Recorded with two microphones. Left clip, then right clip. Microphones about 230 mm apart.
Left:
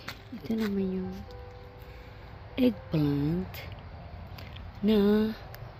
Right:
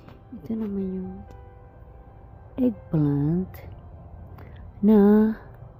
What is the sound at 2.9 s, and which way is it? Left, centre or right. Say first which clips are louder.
Speech: right 4 dB; right.